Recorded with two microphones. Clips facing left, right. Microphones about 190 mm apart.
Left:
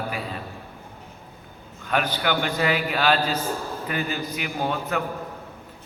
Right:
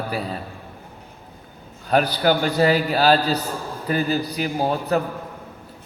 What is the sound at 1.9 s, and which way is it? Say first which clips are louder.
A man's voice: right 6 dB; 35° right (ahead or behind).